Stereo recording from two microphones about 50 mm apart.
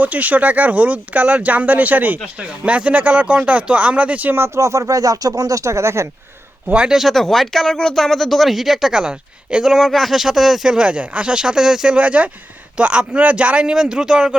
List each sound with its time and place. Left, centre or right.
0.0 s speech: right
2.4 s speech: right
4.4 s speech: right
6.9 s speech: centre
11.9 s speech: right